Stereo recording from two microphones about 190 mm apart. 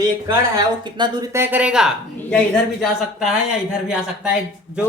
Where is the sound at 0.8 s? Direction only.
25° right (ahead or behind); by 1.9 s 5° right (ahead or behind).